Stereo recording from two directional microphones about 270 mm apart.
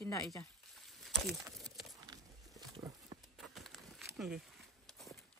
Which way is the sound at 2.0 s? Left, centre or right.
Centre.